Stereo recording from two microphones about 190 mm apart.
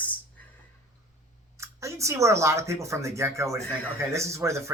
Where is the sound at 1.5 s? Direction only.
15° right (ahead or behind).